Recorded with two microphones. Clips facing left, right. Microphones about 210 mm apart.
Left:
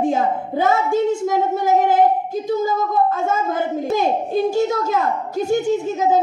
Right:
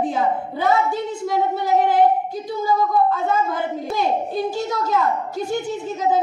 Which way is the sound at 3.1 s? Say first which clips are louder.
Left 1 dB; 45° left (ahead or behind).